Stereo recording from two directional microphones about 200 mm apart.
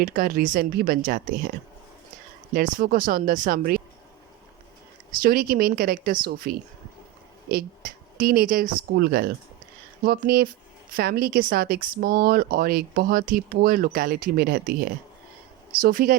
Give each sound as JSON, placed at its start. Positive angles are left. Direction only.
{"t": 0.0, "sound": "speech", "side_deg": -45}
{"t": 2.5, "sound": "speech", "side_deg": -45}
{"t": 5.1, "sound": "speech", "side_deg": -45}